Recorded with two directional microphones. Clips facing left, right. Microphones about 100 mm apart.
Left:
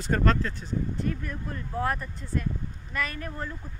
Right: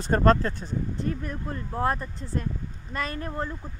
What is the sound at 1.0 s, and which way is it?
Speech, 25° right (ahead or behind).